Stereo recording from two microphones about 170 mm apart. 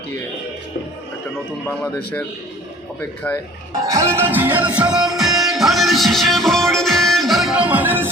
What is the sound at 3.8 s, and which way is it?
Music, 20° right (ahead or behind).